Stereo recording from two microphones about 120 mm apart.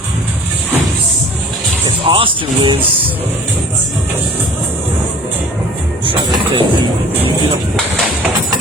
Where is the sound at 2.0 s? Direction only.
50° right (ahead or behind).